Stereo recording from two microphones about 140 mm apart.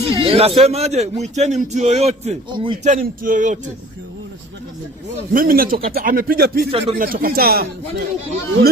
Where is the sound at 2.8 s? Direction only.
65° right (ahead or behind).